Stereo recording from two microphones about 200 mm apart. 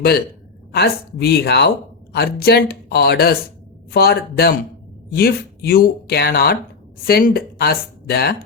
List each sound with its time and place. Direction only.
0.7 s speech: 50° left (ahead or behind)